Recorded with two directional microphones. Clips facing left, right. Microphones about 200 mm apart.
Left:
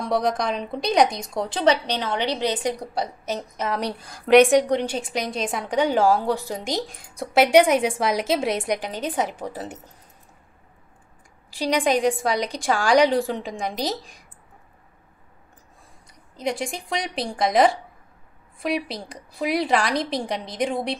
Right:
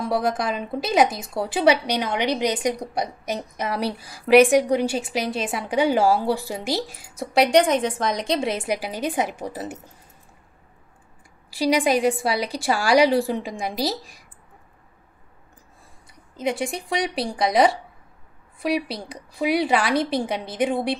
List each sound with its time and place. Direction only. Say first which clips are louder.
0.0 s a woman's voice: even; 5° right (ahead or behind)
11.5 s a woman's voice: right 2 dB; 10° right (ahead or behind)
16.3 s a woman's voice: right 2 dB; centre (ahead or behind)